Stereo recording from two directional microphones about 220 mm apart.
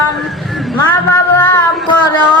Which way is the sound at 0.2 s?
Centre (ahead or behind).